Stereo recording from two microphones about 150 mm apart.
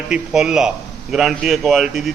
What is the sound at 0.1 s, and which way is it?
A man's voice, 5° right (ahead or behind).